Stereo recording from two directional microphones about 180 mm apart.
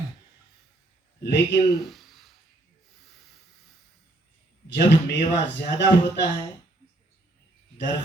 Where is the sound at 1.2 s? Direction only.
70° left (ahead or behind).